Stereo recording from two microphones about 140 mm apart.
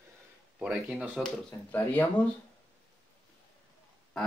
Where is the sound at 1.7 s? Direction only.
15° left (ahead or behind).